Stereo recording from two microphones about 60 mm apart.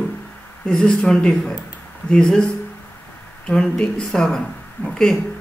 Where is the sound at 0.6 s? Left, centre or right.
Centre.